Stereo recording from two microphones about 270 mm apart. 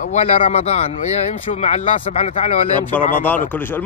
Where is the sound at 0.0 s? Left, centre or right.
Left.